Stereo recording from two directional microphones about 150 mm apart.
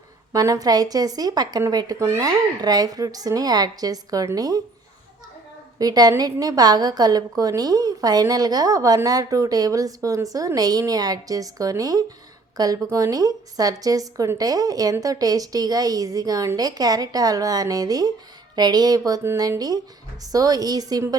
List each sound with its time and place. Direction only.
0.3 s a woman's voice: 25° right (ahead or behind)
5.8 s a woman's voice: 25° right (ahead or behind)